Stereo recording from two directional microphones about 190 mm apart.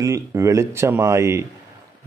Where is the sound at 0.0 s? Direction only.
15° right (ahead or behind).